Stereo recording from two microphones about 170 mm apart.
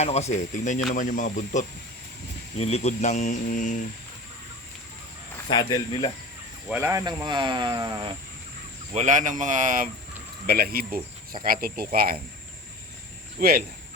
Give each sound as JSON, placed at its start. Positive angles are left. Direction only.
{"t": 0.0, "sound": "speech", "side_deg": 40}
{"t": 2.6, "sound": "speech", "side_deg": 35}
{"t": 5.5, "sound": "speech", "side_deg": 25}
{"t": 6.8, "sound": "speech", "side_deg": -20}
{"t": 8.9, "sound": "speech", "side_deg": -45}
{"t": 10.4, "sound": "speech", "side_deg": -65}
{"t": 13.4, "sound": "speech", "side_deg": -65}